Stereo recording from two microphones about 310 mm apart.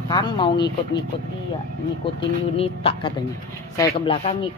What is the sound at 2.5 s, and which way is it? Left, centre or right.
Speech, centre.